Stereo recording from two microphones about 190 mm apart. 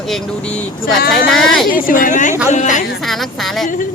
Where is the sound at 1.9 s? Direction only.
45° left (ahead or behind).